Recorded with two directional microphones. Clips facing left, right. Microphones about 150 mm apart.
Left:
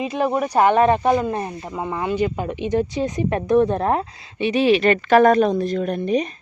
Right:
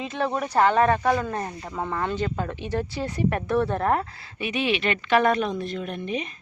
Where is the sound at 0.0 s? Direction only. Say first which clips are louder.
Left 6 dB; 15° left (ahead or behind); by 6.3 s 40° left (ahead or behind).